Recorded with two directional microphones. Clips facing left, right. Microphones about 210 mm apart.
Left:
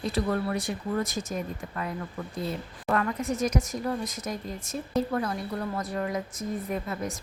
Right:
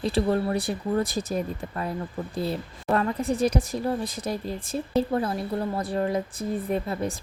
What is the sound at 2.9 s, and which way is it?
Speech, 30° right (ahead or behind).